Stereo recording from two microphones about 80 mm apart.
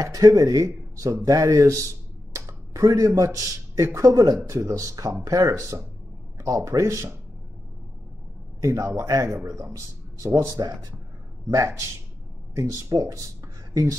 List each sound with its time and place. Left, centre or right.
0.0 s speech: right
8.5 s speech: right